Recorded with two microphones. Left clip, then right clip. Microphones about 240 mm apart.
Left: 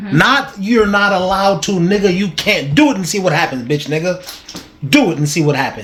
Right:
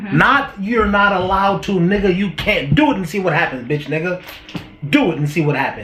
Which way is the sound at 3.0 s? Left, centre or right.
Left.